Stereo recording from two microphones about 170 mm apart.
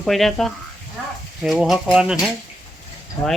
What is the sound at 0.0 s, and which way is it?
Speech, centre (ahead or behind).